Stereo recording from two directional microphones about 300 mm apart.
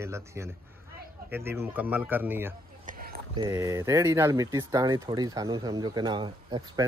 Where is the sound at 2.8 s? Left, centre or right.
Right.